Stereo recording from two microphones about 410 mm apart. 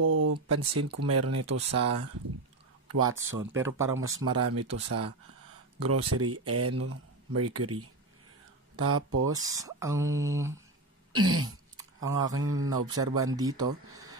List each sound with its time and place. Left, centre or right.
0.0 s speech: right
9.3 s mantra: centre
11.1 s speech: right
13.4 s mantra: centre